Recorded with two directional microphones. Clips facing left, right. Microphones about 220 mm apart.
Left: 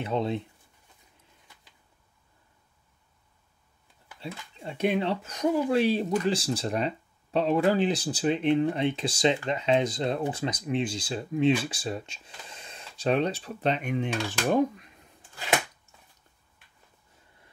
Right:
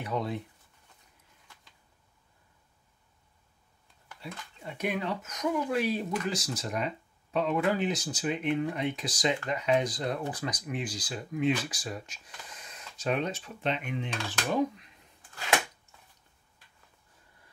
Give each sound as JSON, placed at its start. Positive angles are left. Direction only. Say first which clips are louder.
{"t": 0.0, "sound": "speech", "louder": "left 4 dB", "side_deg": 25}
{"t": 4.2, "sound": "speech", "louder": "left 4 dB", "side_deg": 25}